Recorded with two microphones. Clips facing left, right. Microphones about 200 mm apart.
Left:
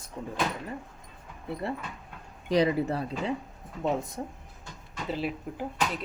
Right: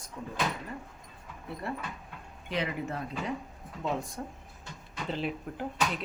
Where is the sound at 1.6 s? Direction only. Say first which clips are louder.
Right 1 dB; 25° left (ahead or behind).